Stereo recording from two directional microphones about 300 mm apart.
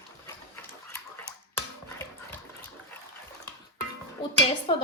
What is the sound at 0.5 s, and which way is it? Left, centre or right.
Sewing machine, centre.